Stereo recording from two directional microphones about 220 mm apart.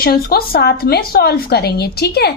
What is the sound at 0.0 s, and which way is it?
A woman's voice, 45° left (ahead or behind).